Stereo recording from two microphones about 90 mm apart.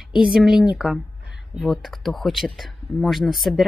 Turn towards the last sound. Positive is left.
turn(degrees=0)  # may be behind; listen again after turning